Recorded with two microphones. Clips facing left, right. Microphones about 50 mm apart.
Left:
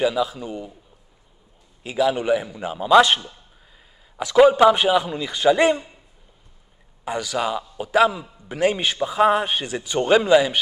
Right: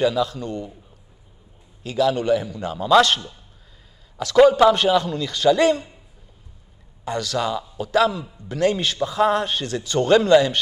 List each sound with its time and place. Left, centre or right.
0.0 s a man's voice: centre
1.8 s a man's voice: centre
7.1 s a man's voice: centre